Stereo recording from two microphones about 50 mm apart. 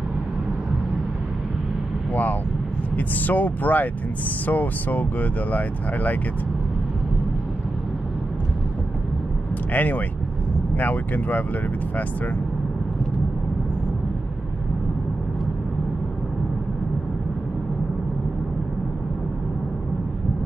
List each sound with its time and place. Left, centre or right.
3.0 s speech: left
9.7 s speech: left